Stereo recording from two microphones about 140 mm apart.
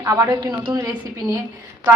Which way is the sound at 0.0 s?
20° right (ahead or behind).